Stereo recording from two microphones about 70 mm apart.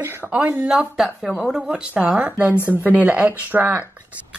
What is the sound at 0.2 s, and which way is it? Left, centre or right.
Speech, centre.